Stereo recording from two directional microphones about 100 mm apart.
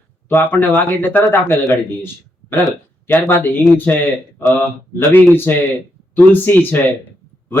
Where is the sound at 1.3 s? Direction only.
20° left (ahead or behind).